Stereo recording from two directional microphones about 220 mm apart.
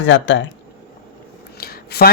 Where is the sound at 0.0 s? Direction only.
60° left (ahead or behind).